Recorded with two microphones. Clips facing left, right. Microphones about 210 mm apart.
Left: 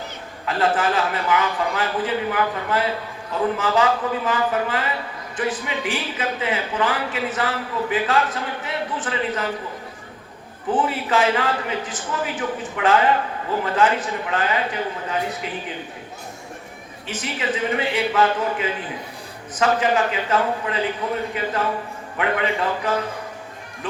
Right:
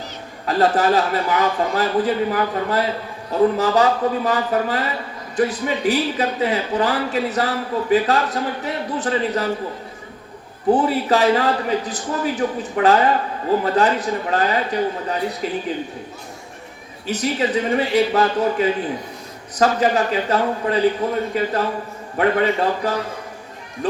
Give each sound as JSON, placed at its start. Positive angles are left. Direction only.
{"t": 0.4, "sound": "speech", "side_deg": -40}
{"t": 10.7, "sound": "speech", "side_deg": -40}
{"t": 17.1, "sound": "speech", "side_deg": -40}
{"t": 22.2, "sound": "speech", "side_deg": -40}